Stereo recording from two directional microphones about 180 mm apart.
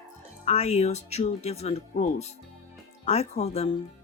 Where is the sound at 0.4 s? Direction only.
40° left (ahead or behind).